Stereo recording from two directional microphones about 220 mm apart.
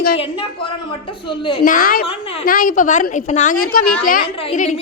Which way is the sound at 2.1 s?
25° left (ahead or behind).